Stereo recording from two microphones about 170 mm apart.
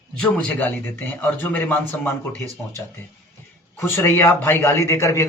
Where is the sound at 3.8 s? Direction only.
15° left (ahead or behind).